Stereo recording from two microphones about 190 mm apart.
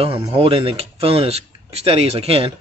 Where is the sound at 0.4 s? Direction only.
30° right (ahead or behind).